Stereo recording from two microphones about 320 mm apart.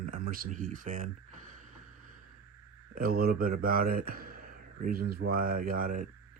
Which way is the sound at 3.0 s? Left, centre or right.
Right.